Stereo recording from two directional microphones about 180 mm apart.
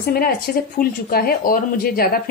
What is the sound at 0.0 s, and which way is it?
Speech, 55° left (ahead or behind).